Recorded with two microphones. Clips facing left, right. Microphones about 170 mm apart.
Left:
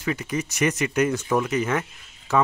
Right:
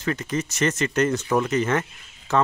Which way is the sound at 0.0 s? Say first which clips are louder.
Right 1 dB; 10° left (ahead or behind).